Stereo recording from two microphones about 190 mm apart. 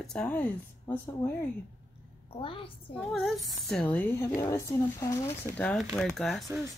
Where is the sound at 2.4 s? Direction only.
30° left (ahead or behind).